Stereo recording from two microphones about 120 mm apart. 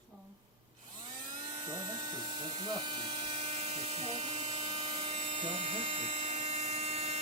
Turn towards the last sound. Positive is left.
turn(degrees=-60)  # may be behind; listen again after turning